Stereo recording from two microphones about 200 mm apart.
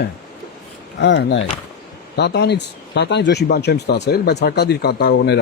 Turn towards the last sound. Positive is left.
turn(degrees=55)  # may be behind; listen again after turning